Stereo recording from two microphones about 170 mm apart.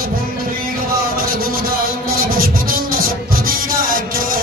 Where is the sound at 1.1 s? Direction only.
60° right (ahead or behind).